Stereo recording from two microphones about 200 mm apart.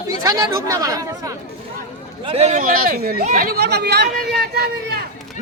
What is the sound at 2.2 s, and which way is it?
Speech, 30° right (ahead or behind).